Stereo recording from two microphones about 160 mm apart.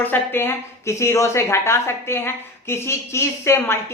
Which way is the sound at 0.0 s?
10° left (ahead or behind).